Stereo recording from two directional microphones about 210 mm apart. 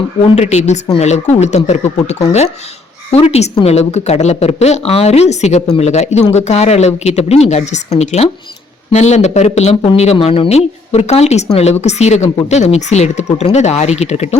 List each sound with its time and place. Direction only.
0.3 s speech: 30° left (ahead or behind)